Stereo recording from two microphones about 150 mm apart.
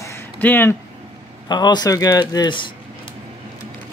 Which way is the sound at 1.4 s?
30° left (ahead or behind).